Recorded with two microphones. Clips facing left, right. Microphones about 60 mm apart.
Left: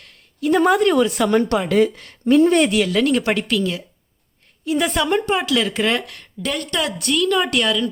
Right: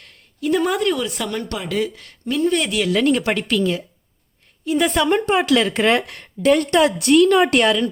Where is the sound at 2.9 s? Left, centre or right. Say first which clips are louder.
Right 1 dB; centre.